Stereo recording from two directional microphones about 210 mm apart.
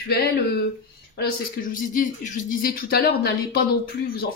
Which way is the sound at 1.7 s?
40° left (ahead or behind).